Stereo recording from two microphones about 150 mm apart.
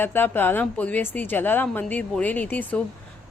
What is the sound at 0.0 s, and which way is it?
Speech, 15° left (ahead or behind).